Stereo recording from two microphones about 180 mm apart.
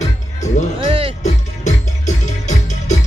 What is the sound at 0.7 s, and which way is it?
Music, 30° right (ahead or behind).